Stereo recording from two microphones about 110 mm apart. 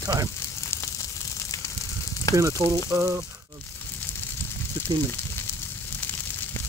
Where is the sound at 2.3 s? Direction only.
30° left (ahead or behind).